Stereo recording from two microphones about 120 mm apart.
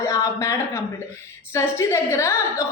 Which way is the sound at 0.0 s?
25° left (ahead or behind).